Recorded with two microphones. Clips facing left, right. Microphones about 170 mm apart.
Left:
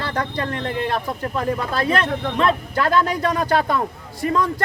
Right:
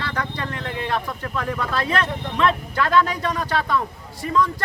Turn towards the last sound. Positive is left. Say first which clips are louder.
# left 1 dB
turn(degrees=50)  # may be behind; listen again after turning